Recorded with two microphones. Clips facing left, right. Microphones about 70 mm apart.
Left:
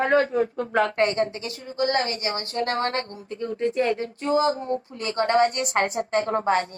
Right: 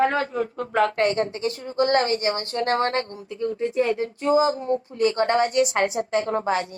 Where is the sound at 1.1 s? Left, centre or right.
Right.